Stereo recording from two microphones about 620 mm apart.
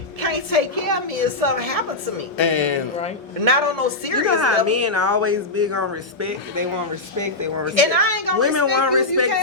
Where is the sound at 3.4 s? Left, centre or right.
Right.